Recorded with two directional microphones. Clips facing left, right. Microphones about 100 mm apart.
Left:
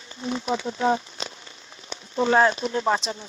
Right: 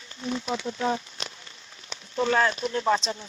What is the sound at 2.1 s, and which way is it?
Speech, 25° left (ahead or behind).